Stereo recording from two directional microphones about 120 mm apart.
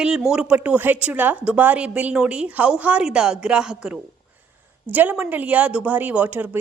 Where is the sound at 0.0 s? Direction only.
5° right (ahead or behind).